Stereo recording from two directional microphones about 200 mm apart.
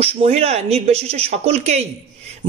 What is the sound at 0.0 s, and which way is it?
Speech, 30° right (ahead or behind).